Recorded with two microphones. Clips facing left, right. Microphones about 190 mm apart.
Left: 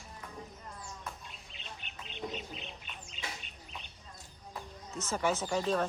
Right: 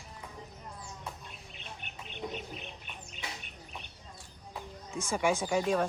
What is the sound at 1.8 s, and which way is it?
Bird, 55° right (ahead or behind).